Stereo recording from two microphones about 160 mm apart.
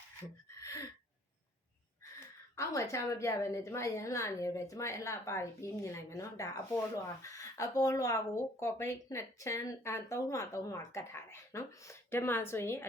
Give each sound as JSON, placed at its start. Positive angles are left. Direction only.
{"t": 2.6, "sound": "a woman's voice", "side_deg": 20}